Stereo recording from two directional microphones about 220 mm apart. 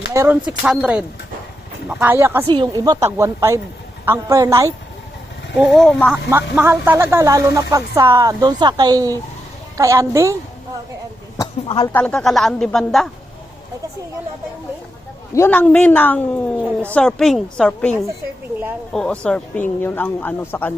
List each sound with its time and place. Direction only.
0.1 s speech: 15° right (ahead or behind)
5.5 s speech: centre (ahead or behind)
6.3 s speech: 10° right (ahead or behind)
11.3 s a sound: 20° left (ahead or behind)
11.9 s speech: 5° left (ahead or behind)
15.4 s speech: 5° left (ahead or behind)